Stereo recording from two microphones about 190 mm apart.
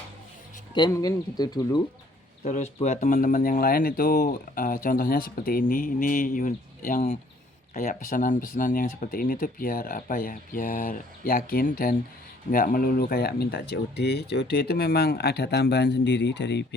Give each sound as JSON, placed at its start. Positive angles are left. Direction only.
{"t": 0.7, "sound": "speech", "side_deg": 20}
{"t": 2.4, "sound": "speech", "side_deg": 35}